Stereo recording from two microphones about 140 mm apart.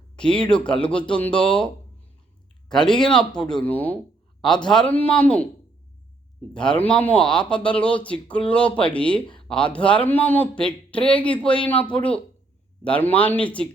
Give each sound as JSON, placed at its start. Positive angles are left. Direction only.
{"t": 0.2, "sound": "speech", "side_deg": 5}
{"t": 6.5, "sound": "speech", "side_deg": 5}
{"t": 9.2, "sound": "a sound", "side_deg": 35}
{"t": 9.5, "sound": "speech", "side_deg": 10}